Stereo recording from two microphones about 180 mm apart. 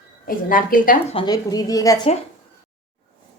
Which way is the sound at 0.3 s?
50° left (ahead or behind).